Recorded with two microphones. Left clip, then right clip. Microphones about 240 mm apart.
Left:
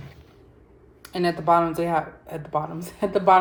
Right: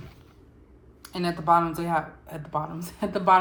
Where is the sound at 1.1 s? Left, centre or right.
Right.